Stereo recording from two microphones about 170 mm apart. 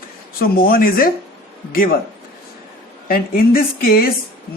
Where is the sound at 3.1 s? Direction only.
60° left (ahead or behind).